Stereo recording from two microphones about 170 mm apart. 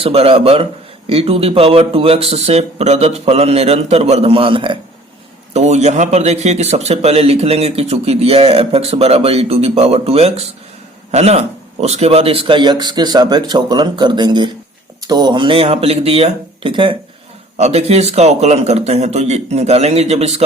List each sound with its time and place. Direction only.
0.0 s a man's voice: 35° right (ahead or behind)
5.5 s a man's voice: 40° right (ahead or behind)